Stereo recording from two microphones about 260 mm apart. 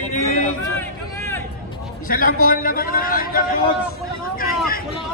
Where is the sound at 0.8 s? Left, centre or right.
Centre.